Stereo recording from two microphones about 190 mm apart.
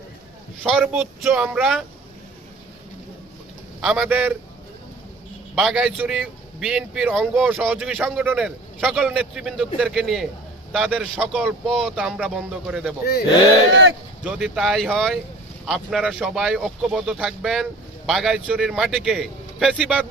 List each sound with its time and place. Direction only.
0.8 s speech: 5° right (ahead or behind)
3.8 s speech: 5° right (ahead or behind)
5.5 s speech: 5° right (ahead or behind)
14.3 s speech: 5° right (ahead or behind)